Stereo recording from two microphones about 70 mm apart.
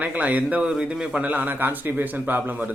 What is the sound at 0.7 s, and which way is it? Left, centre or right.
A man's voice, centre.